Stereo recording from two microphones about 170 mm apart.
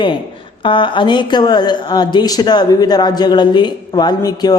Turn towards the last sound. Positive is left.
turn(degrees=20)  # may be behind; listen again after turning